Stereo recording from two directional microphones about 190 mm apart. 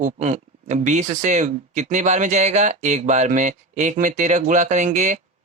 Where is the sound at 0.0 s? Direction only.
40° right (ahead or behind).